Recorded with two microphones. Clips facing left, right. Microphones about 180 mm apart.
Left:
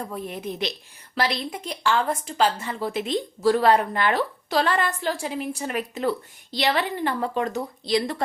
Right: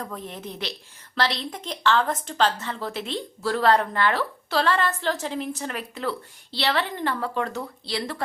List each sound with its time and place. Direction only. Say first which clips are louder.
0.0 s a woman's voice: left 3 dB; 10° left (ahead or behind)